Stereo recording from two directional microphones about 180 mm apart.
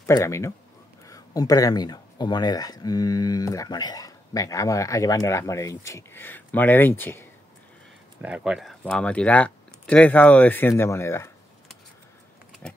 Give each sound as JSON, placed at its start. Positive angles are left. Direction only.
{"t": 0.0, "sound": "speech", "side_deg": 15}
{"t": 8.2, "sound": "speech", "side_deg": -5}